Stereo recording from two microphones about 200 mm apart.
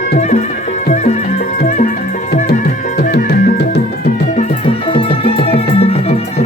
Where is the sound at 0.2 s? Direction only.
35° left (ahead or behind).